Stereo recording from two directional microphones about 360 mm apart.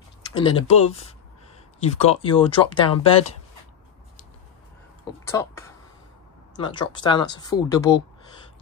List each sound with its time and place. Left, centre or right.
0.3 s speech: centre
5.2 s speech: centre